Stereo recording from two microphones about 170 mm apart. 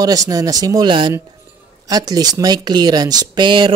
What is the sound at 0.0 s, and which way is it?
Speech, 20° right (ahead or behind).